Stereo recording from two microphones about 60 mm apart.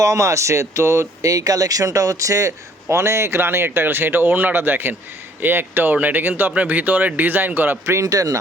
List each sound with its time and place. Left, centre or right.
0.0 s speech: right
1.3 s speech: right
2.9 s a man's voice: right
8.0 s speech: right